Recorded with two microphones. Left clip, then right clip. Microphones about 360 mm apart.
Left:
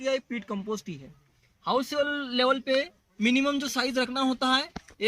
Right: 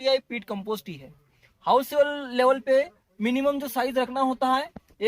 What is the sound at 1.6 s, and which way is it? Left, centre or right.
Speech, centre.